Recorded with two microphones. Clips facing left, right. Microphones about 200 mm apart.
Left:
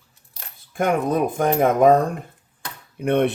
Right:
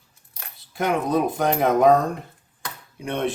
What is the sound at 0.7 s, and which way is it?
Speech, 50° left (ahead or behind).